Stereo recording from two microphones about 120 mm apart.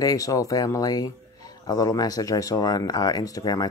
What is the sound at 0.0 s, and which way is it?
Speech, 30° left (ahead or behind).